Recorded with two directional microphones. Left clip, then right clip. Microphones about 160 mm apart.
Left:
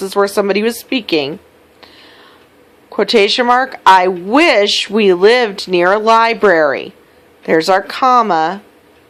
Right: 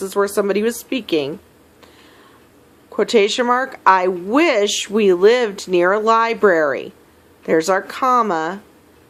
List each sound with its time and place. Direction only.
0.0 s speech: 25° left (ahead or behind)
2.9 s speech: 25° left (ahead or behind)